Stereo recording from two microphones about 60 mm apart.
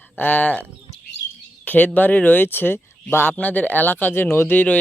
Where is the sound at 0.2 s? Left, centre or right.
Left.